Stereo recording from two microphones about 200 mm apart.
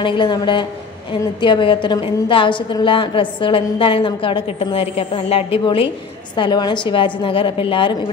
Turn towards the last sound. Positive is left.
turn(degrees=25)  # may be behind; listen again after turning